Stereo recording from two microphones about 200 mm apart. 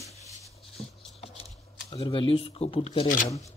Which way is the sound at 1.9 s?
25° left (ahead or behind).